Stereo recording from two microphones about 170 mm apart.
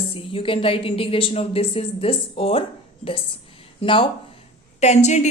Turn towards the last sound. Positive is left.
turn(degrees=40)  # may be behind; listen again after turning